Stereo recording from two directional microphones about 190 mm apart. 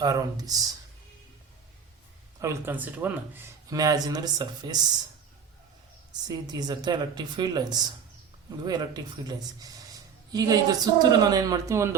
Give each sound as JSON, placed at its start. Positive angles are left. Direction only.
{"t": 0.0, "sound": "a woman's voice", "side_deg": -20}
{"t": 2.4, "sound": "speech", "side_deg": -15}
{"t": 6.2, "sound": "a woman's voice", "side_deg": -20}